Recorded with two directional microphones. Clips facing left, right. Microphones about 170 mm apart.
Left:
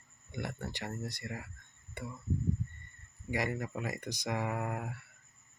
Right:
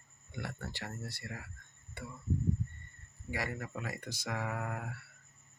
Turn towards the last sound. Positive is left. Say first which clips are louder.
# left 3 dB
turn(degrees=20)  # may be behind; listen again after turning